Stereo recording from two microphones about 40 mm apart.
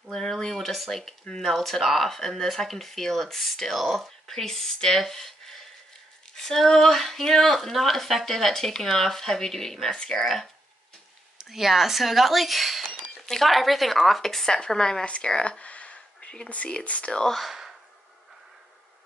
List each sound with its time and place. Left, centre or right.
0.1 s speech: centre
4.3 s speech: centre
9.8 s speech: left
10.1 s speech: centre
11.4 s speech: centre
15.0 s speech: left
15.6 s a sound: left
16.4 s speech: left
17.5 s a sound: centre